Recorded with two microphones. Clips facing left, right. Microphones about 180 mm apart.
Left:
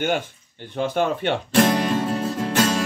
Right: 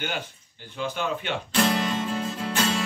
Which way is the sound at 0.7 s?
55° left (ahead or behind).